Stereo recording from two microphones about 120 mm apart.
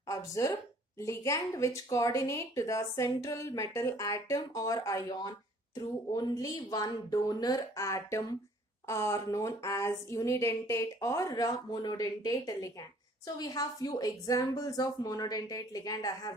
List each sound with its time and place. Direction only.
0.1 s a woman's voice: 30° left (ahead or behind)